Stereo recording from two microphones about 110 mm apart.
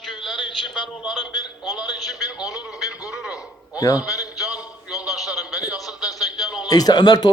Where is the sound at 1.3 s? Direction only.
40° left (ahead or behind).